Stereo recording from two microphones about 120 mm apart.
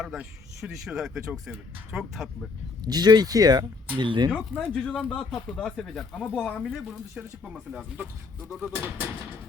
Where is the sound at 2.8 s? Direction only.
35° right (ahead or behind).